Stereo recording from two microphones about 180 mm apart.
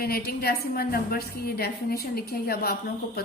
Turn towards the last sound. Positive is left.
turn(degrees=60)  # may be behind; listen again after turning